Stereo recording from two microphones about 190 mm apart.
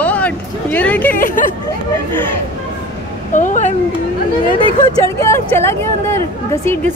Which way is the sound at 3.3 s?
40° left (ahead or behind).